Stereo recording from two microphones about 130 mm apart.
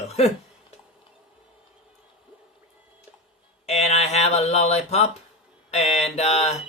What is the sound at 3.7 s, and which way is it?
Speech, 55° left (ahead or behind).